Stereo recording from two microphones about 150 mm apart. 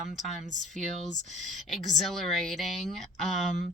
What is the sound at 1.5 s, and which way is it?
Speech, centre (ahead or behind).